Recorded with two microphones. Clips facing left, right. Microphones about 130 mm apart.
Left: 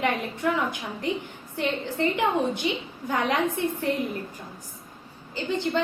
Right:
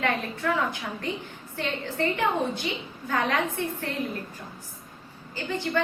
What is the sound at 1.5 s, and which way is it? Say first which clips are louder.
A woman's voice: left 2 dB; 20° left (ahead or behind).